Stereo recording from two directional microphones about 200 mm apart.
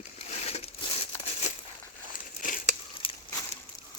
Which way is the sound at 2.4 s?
40° left (ahead or behind).